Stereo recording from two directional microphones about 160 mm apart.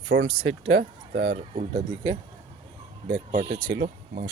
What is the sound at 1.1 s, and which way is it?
Speech, 35° right (ahead or behind).